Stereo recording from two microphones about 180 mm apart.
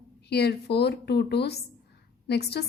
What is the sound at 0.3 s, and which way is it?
A woman's voice, 65° left (ahead or behind).